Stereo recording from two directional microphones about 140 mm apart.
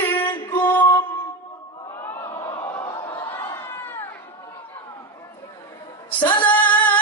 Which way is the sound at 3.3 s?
15° left (ahead or behind).